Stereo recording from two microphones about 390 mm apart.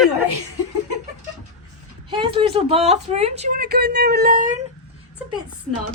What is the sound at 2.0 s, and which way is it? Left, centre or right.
Speech, centre.